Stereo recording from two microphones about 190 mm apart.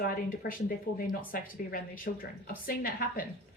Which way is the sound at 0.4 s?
50° left (ahead or behind).